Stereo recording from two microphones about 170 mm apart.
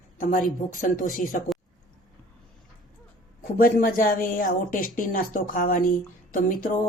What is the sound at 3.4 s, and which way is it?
A man's voice, 55° left (ahead or behind).